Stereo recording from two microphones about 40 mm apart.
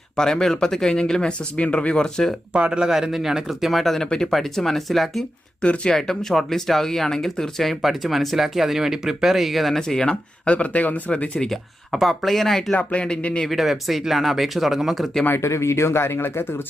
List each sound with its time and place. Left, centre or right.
0.2 s speech: centre
1.5 s speech: left
2.5 s speech: right
2.9 s a man's voice: centre
3.6 s speech: centre
9.7 s speech: centre
10.4 s speech: left
12.2 s speech: centre
12.7 s speech: left
13.5 s speech: centre
15.3 s speech: left